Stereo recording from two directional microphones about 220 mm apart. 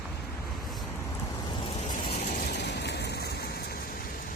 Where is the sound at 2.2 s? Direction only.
40° left (ahead or behind).